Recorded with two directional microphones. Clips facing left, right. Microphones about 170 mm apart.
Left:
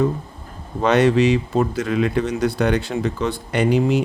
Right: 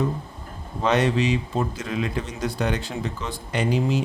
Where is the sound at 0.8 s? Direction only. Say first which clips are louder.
Left 6 dB; 65° left (ahead or behind).